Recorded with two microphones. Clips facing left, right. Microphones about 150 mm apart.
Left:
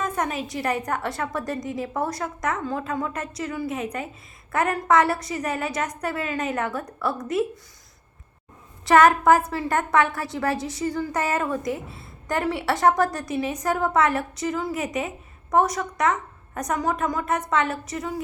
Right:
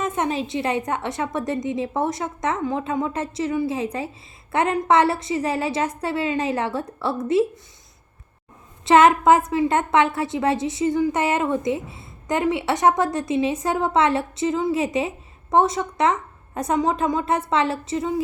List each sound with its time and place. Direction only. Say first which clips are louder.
0.0 s a woman's voice: right 3 dB; 25° right (ahead or behind)
8.8 s a woman's voice: right 2 dB; 25° right (ahead or behind)